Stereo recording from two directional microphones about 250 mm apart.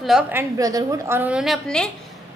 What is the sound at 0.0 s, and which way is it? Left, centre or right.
A woman's voice, centre.